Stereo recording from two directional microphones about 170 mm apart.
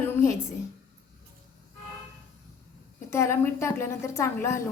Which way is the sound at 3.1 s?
15° left (ahead or behind).